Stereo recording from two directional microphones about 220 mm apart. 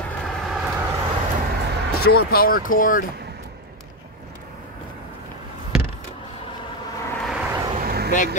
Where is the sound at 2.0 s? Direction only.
45° left (ahead or behind).